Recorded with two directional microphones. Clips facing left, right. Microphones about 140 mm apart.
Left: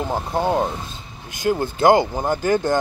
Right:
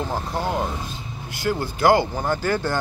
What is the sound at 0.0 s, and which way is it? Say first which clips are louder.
Speech: left 4 dB; 20° left (ahead or behind).